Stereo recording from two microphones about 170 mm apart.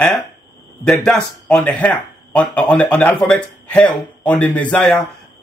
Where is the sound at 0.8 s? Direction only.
5° left (ahead or behind).